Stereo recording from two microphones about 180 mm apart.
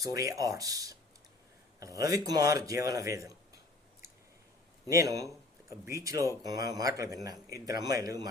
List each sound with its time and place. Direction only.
0.0 s a man's voice: 20° right (ahead or behind)
4.9 s a man's voice: 15° right (ahead or behind)